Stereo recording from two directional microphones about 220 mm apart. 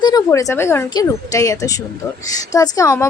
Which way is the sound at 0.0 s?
15° left (ahead or behind).